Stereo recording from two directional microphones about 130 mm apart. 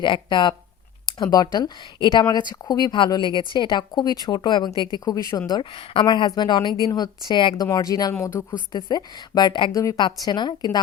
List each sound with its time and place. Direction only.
0.0 s a woman's voice: 35° left (ahead or behind)
7.5 s speech: 25° left (ahead or behind)
8.2 s speech: 20° left (ahead or behind)
8.7 s a woman's voice: 30° left (ahead or behind)